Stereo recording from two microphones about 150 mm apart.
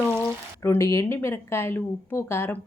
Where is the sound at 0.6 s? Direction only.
20° left (ahead or behind).